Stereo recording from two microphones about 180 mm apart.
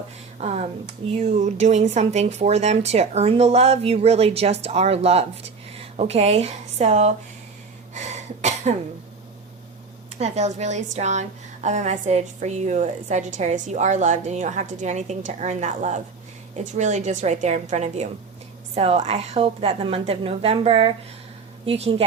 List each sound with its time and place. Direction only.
0.3 s a woman's voice: 40° right (ahead or behind)
7.9 s cough: 40° right (ahead or behind)
10.2 s a woman's voice: 40° right (ahead or behind)